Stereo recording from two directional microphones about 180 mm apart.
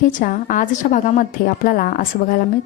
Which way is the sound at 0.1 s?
50° left (ahead or behind).